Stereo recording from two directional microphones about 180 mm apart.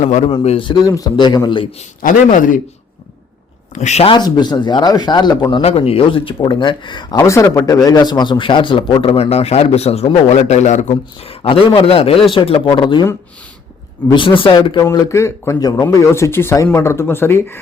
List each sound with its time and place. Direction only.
0.0 s a man's voice: 40° left (ahead or behind)
0.4 s a man's voice: 30° left (ahead or behind)
2.0 s a man's voice: 50° left (ahead or behind)
3.8 s speech: 40° left (ahead or behind)
11.4 s speech: 30° left (ahead or behind)
14.1 s speech: 25° left (ahead or behind)
14.8 s speech: 15° left (ahead or behind)